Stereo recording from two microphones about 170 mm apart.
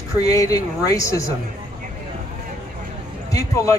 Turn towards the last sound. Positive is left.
turn(degrees=20)  # may be behind; listen again after turning